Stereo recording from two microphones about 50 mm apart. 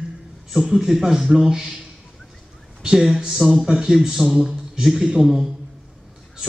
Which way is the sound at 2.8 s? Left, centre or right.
Centre.